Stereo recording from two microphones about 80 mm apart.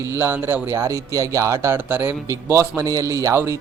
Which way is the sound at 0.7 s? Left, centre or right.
Right.